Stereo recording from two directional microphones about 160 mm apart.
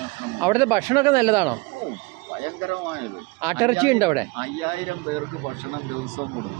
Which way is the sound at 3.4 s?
15° right (ahead or behind).